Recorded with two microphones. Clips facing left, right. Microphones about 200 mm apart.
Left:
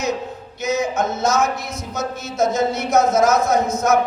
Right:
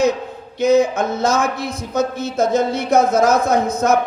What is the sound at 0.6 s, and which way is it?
Speech, 55° right (ahead or behind).